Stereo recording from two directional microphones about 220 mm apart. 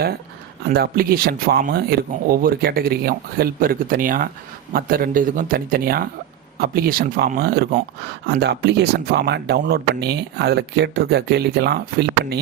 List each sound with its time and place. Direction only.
0.7 s speech: 45° right (ahead or behind)